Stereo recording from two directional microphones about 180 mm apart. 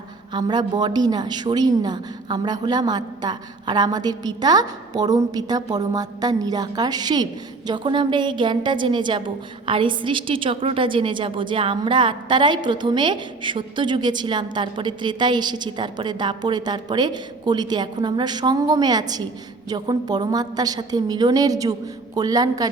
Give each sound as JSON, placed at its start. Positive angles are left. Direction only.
{"t": 0.3, "sound": "a woman's voice", "side_deg": -25}